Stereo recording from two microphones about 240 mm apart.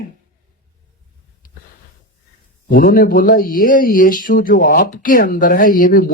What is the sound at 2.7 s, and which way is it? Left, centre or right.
A man's voice, left.